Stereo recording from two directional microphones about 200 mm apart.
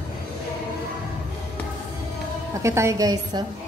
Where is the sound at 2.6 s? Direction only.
15° right (ahead or behind).